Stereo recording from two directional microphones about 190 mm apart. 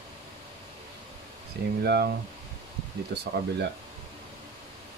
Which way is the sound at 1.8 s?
60° right (ahead or behind).